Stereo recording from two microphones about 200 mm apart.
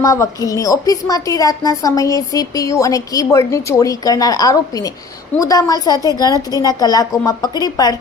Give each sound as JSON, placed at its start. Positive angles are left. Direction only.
{"t": 0.0, "sound": "a woman's voice", "side_deg": 15}